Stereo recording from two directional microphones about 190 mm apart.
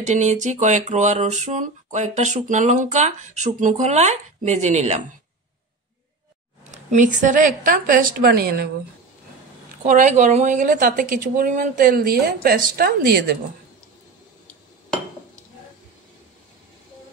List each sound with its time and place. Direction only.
0.0 s speech: 40° right (ahead or behind)
6.6 s a woman's voice: 40° right (ahead or behind); by 8.6 s 55° right (ahead or behind)
9.8 s a woman's voice: 40° right (ahead or behind)